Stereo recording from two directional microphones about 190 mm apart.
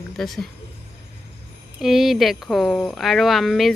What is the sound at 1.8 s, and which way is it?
Speech, centre (ahead or behind).